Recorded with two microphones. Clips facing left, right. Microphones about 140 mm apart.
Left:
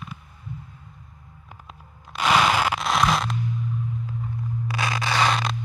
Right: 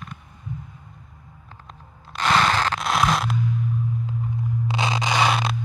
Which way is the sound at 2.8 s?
Centre (ahead or behind).